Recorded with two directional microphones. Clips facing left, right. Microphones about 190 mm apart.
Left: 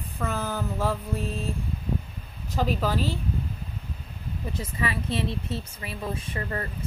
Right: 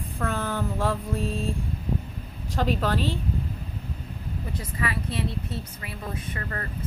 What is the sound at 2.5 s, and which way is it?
Speech, 5° left (ahead or behind).